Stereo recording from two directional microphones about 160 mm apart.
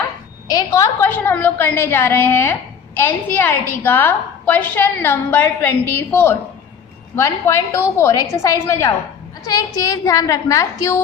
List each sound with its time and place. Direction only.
0.4 s a woman's voice: 20° left (ahead or behind)